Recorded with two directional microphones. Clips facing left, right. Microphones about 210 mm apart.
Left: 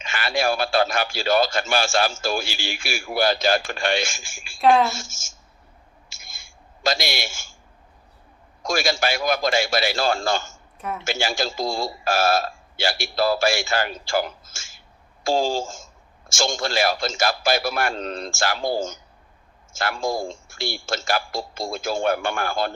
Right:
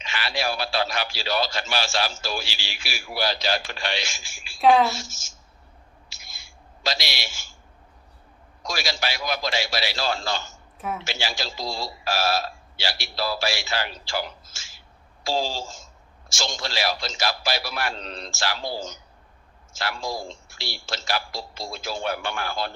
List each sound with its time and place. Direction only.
0.0 s a man's voice: 50° left (ahead or behind)
4.6 s a woman's voice: centre (ahead or behind)
4.9 s a man's voice: 50° left (ahead or behind)
6.1 s a sound: 50° left (ahead or behind)
8.6 s a man's voice: 50° left (ahead or behind)